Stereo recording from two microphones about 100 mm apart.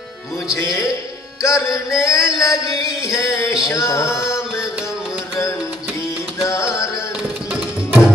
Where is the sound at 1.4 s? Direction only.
30° left (ahead or behind).